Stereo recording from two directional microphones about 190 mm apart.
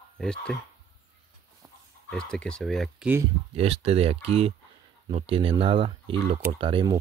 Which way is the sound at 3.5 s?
30° right (ahead or behind).